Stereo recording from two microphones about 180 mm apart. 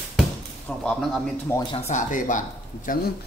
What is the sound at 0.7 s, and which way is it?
Speech, 5° left (ahead or behind).